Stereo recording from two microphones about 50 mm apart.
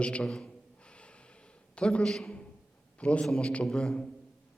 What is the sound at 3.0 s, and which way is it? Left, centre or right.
A man's voice, left.